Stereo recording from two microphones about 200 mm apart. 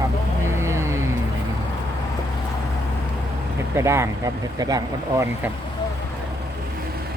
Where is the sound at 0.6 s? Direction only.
15° right (ahead or behind).